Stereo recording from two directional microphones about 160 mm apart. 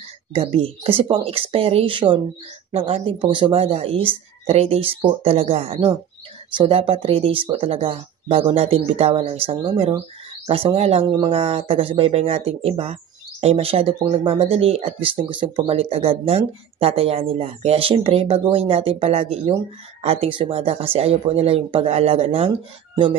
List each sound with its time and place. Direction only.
0.3 s speech: 35° right (ahead or behind)